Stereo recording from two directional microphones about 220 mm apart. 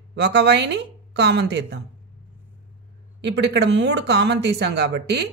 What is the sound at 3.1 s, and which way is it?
Speech, 50° right (ahead or behind).